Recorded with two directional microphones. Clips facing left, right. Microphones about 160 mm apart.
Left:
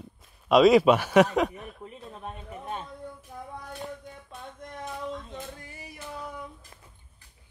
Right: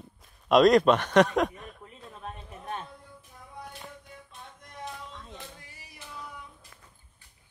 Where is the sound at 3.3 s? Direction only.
70° left (ahead or behind).